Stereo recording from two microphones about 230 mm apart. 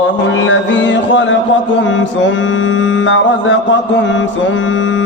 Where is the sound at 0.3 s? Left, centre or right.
Left.